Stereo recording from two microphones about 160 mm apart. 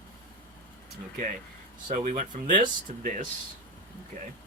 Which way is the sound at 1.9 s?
50° right (ahead or behind).